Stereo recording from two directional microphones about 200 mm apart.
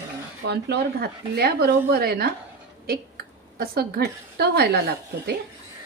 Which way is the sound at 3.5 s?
50° right (ahead or behind).